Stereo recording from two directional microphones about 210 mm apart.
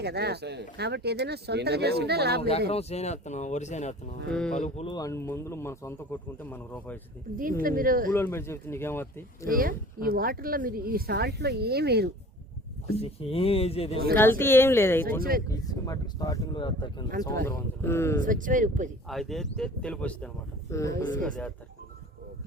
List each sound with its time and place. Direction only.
0.0 s speech: 50° right (ahead or behind)
2.6 s speech: 30° left (ahead or behind)
4.3 s speech: 5° left (ahead or behind)
4.6 s speech: 30° left (ahead or behind)
4.9 s speech: 15° left (ahead or behind)
7.6 s speech: 40° right (ahead or behind)
8.1 s speech: 10° left (ahead or behind)
9.5 s speech: 40° right (ahead or behind)
13.0 s speech: 25° left (ahead or behind)
14.2 s speech: 10° left (ahead or behind)
15.2 s speech: 45° right (ahead or behind)
15.4 s speech: 15° left (ahead or behind)
18.2 s speech: 40° right (ahead or behind)
19.0 s speech: centre (ahead or behind)